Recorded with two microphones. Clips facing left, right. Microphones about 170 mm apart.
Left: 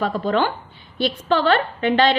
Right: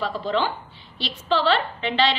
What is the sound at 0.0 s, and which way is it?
A woman's voice, 55° left (ahead or behind).